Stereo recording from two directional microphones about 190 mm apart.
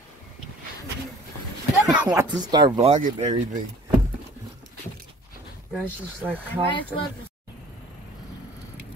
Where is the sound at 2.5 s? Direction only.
20° right (ahead or behind).